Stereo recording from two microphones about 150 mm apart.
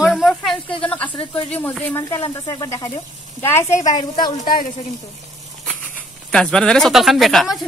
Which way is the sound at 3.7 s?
55° left (ahead or behind).